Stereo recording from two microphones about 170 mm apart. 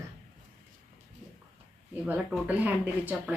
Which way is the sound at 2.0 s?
10° right (ahead or behind).